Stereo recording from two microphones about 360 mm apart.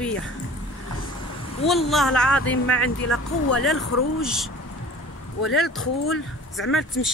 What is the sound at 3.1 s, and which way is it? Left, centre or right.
Speech, left.